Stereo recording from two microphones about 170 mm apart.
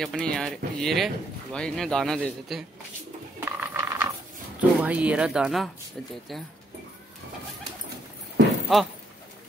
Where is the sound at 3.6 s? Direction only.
10° right (ahead or behind).